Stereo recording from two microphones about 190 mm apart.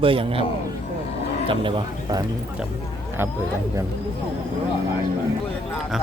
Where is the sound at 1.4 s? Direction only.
25° right (ahead or behind).